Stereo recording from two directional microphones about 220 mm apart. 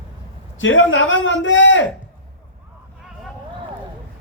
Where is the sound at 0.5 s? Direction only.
60° left (ahead or behind).